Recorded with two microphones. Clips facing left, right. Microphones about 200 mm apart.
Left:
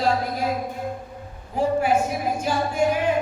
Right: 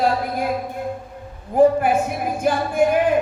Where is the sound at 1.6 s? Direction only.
55° right (ahead or behind).